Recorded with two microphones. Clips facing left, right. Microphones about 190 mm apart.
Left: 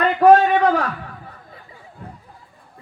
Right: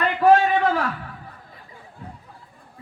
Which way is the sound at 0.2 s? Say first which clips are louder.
Left 4 dB; 40° left (ahead or behind).